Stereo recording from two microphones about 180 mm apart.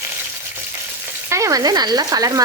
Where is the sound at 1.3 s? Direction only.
15° right (ahead or behind).